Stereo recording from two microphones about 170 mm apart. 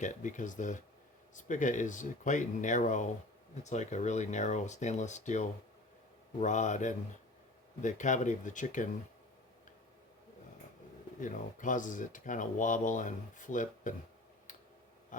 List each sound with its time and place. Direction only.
0.0 s speech: 45° left (ahead or behind)
11.2 s speech: 50° left (ahead or behind)